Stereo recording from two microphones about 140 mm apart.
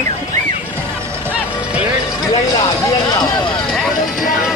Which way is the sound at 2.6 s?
30° left (ahead or behind).